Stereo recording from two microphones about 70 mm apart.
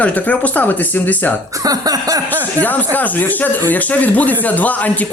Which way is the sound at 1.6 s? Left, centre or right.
Right.